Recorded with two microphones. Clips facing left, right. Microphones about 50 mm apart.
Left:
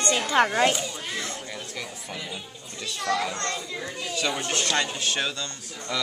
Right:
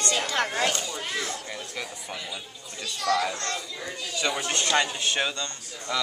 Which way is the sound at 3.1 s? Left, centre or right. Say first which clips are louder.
Right 2 dB; left.